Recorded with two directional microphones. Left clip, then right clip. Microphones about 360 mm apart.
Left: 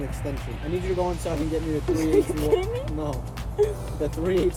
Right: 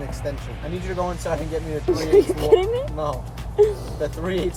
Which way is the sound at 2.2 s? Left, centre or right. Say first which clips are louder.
Right 6 dB; right.